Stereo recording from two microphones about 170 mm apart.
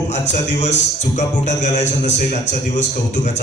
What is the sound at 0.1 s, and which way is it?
Speech, 45° left (ahead or behind).